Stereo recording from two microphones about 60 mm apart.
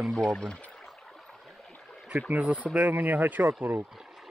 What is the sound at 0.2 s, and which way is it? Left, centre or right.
Speech, centre.